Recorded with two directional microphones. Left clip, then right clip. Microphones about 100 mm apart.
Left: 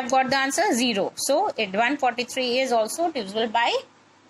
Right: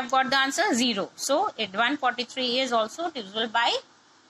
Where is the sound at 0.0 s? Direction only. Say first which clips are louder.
Left 2 dB; 35° left (ahead or behind).